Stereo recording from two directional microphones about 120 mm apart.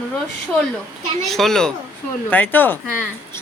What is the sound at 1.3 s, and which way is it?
A woman's voice, 5° left (ahead or behind).